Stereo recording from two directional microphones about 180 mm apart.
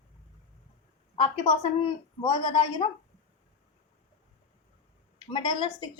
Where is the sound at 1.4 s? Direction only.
25° left (ahead or behind).